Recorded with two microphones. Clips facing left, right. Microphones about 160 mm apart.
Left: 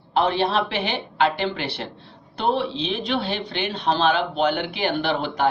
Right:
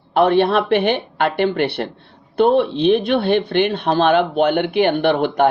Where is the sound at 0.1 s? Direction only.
60° right (ahead or behind).